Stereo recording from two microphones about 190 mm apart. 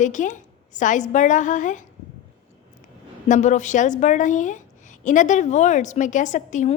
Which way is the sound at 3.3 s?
40° left (ahead or behind).